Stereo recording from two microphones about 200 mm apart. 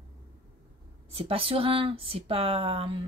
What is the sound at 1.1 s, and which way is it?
Speech, 30° right (ahead or behind).